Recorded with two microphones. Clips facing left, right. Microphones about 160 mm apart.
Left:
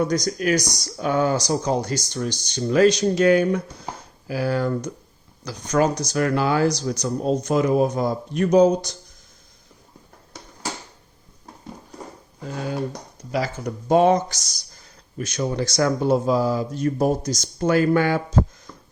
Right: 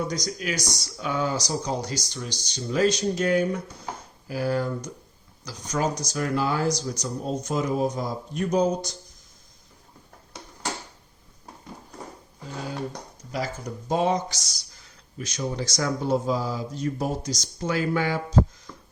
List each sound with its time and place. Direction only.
0.0 s speech: 55° left (ahead or behind); by 4.9 s 80° left
5.5 s speech: 65° left (ahead or behind)
13.3 s speech: 70° left (ahead or behind)